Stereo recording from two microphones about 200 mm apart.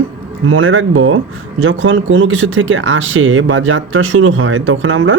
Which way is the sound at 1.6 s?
70° right (ahead or behind).